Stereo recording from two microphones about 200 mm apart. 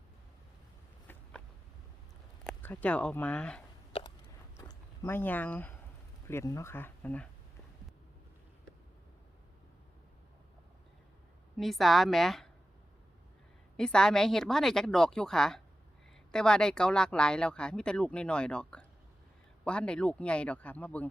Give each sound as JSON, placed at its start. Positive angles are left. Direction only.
{"t": 2.4, "sound": "speech", "side_deg": 5}
{"t": 3.9, "sound": "a sound", "side_deg": 30}
{"t": 4.5, "sound": "a sound", "side_deg": 15}
{"t": 6.2, "sound": "speech", "side_deg": 15}
{"t": 11.5, "sound": "speech", "side_deg": 0}
{"t": 13.7, "sound": "speech", "side_deg": 5}